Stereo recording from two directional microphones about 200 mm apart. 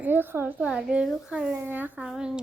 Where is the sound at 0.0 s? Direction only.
10° right (ahead or behind).